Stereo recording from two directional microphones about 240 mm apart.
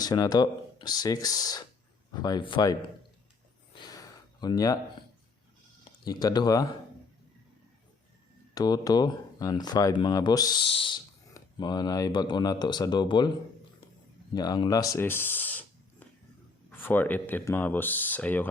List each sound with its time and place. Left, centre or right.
0.0 s speech: centre
3.8 s gasp: centre
6.1 s speech: centre
8.5 s speech: centre
14.3 s speech: centre